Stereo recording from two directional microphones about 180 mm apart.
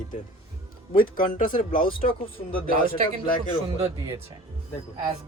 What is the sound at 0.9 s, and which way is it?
A man's voice, 50° left (ahead or behind).